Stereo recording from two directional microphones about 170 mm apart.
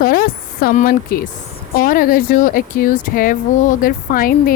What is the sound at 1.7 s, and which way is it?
Speech, 55° left (ahead or behind).